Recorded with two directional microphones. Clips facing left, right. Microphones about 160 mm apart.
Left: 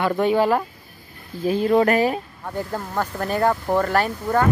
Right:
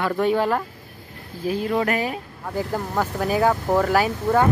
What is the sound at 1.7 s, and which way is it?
Speech, 40° left (ahead or behind).